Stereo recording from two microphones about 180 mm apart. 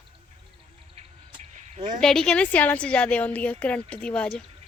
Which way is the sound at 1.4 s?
40° right (ahead or behind).